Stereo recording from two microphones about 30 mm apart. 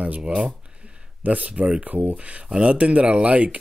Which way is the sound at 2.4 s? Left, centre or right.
Right.